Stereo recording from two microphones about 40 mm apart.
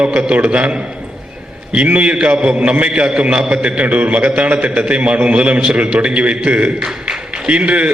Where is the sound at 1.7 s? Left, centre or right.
Right.